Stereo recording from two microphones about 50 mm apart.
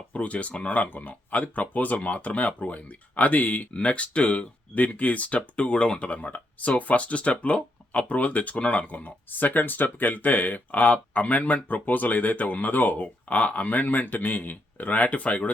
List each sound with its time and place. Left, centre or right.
0.1 s speech: left